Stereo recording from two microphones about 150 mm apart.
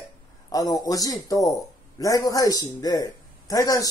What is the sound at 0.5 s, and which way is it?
A man's voice, 25° left (ahead or behind).